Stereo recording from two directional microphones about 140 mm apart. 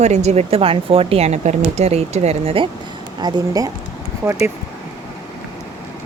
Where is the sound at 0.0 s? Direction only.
55° right (ahead or behind).